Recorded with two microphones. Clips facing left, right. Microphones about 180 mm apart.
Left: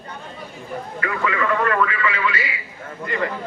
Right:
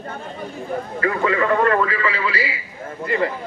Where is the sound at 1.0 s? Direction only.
30° right (ahead or behind).